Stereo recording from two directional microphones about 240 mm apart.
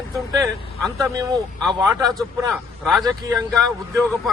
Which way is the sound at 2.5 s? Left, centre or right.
Centre.